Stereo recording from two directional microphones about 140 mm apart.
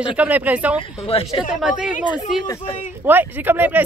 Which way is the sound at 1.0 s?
45° left (ahead or behind).